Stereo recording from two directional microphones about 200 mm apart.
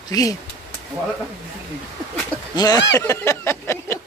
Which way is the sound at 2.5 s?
20° left (ahead or behind).